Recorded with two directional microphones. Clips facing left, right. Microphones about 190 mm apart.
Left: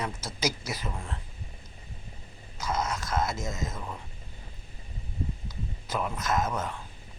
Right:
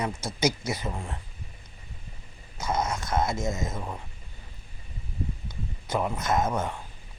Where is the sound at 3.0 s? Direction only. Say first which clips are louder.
Right 3 dB; 25° right (ahead or behind).